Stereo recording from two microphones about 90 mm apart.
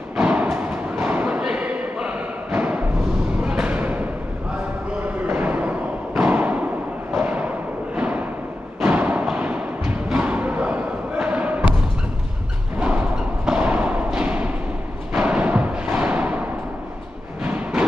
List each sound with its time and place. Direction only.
0.2 s thump: 15° right (ahead or behind)
0.5 s a sound: 20° right (ahead or behind)
5.3 s a sound: 20° right (ahead or behind)
7.2 s music: 20° right (ahead or behind)
13.5 s thump: 15° right (ahead or behind)
15.1 s timpani: 15° right (ahead or behind)